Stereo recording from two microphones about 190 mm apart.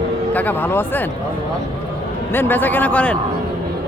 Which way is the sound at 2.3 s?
10° left (ahead or behind).